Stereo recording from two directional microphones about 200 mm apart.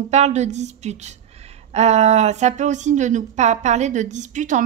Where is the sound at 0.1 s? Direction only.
35° right (ahead or behind).